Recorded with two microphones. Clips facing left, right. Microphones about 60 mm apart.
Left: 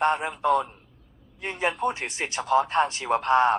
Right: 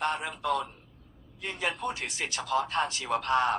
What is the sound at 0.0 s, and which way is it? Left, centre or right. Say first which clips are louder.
Speech: left 7 dB; left.